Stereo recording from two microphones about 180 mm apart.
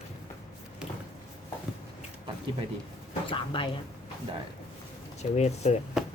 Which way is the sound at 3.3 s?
30° left (ahead or behind).